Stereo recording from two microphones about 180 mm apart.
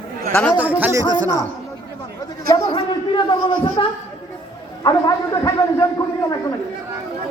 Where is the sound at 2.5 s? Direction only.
30° left (ahead or behind).